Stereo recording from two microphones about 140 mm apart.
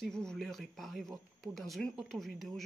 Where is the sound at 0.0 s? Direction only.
5° left (ahead or behind).